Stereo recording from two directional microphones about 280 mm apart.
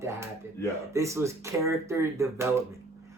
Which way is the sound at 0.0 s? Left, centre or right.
Centre.